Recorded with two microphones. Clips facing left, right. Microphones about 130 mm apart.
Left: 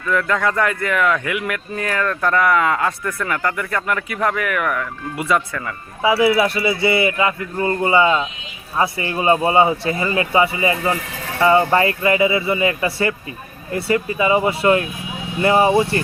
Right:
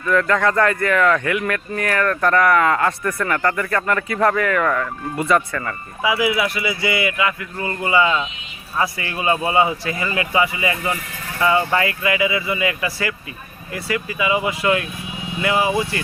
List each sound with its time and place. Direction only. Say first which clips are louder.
0.1 s speech: right 2 dB; 10° left (ahead or behind)
3.0 s speech: right 2 dB; centre (ahead or behind)
6.0 s a man's voice: left 4 dB; 30° left (ahead or behind)